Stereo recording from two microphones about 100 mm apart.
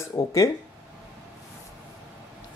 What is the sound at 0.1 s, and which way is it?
Speech, 35° left (ahead or behind).